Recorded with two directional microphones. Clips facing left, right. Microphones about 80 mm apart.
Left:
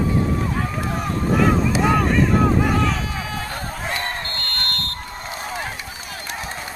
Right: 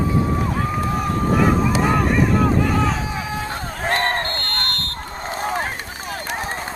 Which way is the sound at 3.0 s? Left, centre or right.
Centre.